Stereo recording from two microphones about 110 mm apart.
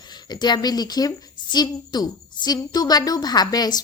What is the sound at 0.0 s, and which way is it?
A woman's voice, 40° left (ahead or behind).